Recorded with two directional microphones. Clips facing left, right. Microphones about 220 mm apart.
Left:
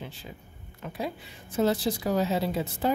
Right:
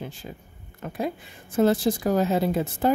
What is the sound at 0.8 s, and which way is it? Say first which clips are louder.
Speech: right 5 dB; 50° right (ahead or behind).